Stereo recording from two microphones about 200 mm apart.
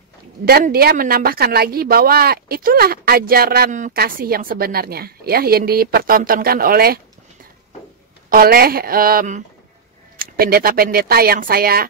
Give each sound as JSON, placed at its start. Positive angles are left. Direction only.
{"t": 0.5, "sound": "speech", "side_deg": -50}
{"t": 8.3, "sound": "speech", "side_deg": -45}